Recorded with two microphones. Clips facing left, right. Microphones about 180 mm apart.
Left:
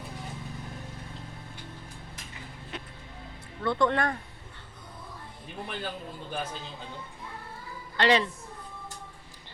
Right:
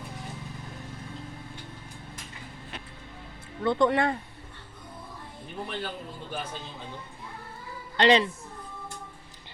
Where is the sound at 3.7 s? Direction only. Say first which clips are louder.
Right 3 dB; 20° right (ahead or behind).